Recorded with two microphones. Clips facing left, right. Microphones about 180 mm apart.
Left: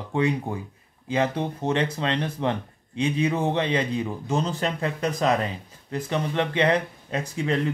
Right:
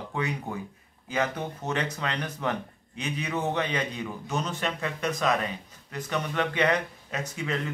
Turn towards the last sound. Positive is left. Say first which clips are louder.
# left 6 dB
turn(degrees=30)  # may be behind; listen again after turning